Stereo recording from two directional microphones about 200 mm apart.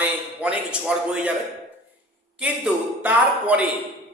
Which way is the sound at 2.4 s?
5° right (ahead or behind).